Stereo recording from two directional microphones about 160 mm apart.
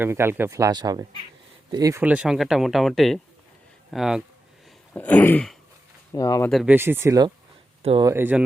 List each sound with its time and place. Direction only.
0.0 s speech: 15° right (ahead or behind)
2.0 s speech: 10° right (ahead or behind)
4.9 s throat clearing: 10° left (ahead or behind)
6.1 s speech: 20° left (ahead or behind)
6.7 s speech: 15° right (ahead or behind)
7.8 s speech: 35° right (ahead or behind)
8.0 s speech: 15° right (ahead or behind)